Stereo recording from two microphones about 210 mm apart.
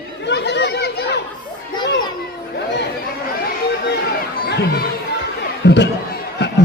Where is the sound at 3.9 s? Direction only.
55° left (ahead or behind).